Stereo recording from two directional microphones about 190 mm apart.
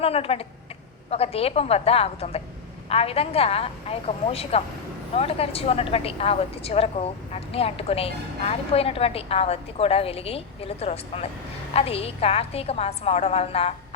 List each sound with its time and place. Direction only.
0.0 s a woman's voice: 30° left (ahead or behind)